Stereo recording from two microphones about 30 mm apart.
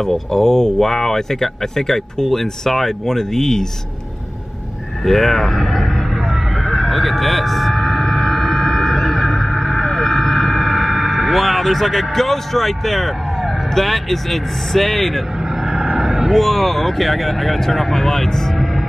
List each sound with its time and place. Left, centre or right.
0.3 s speech: centre
5.0 s speech: centre
6.3 s vehicle: centre
15.5 s vehicle: centre
16.0 s a sound: centre
16.3 s speech: centre